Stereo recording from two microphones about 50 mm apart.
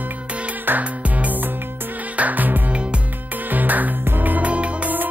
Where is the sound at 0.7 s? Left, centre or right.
Right.